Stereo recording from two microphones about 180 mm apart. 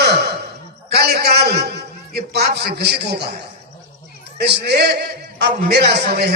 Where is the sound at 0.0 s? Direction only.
65° right (ahead or behind).